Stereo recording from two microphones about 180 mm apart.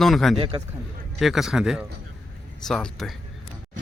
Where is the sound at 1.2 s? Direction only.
Centre (ahead or behind).